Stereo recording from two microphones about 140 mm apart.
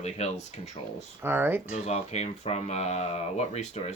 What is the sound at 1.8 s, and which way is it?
Speech, 50° left (ahead or behind).